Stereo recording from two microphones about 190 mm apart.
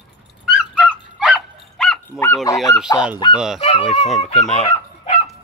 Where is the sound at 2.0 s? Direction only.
15° left (ahead or behind).